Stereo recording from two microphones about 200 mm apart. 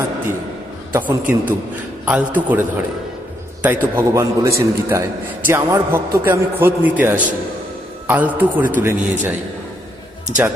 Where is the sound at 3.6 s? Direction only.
10° right (ahead or behind).